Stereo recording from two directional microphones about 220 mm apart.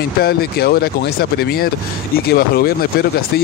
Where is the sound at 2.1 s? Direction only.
45° left (ahead or behind).